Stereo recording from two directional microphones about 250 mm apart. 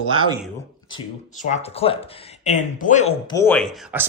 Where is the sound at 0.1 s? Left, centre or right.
Centre.